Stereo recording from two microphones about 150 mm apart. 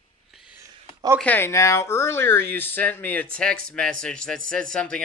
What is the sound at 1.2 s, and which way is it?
Speech, 15° left (ahead or behind).